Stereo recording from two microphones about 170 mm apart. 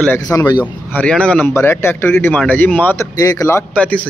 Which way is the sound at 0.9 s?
5° left (ahead or behind).